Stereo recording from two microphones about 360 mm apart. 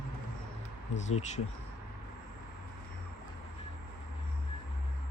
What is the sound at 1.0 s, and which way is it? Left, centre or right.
Speech, centre.